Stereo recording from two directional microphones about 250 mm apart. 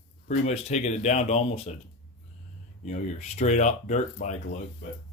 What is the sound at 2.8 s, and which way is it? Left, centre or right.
Speech, left.